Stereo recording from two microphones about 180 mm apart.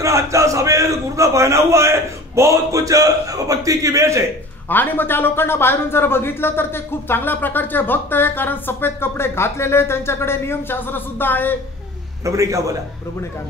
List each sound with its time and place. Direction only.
0.0 s a man's voice: 15° right (ahead or behind)
4.6 s speech: 10° left (ahead or behind)
12.3 s a man's voice: 15° right (ahead or behind)